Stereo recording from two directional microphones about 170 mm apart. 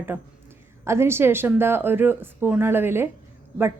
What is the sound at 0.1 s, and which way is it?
A woman's voice, 10° right (ahead or behind).